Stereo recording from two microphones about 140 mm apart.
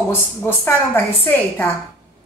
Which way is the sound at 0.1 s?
15° left (ahead or behind).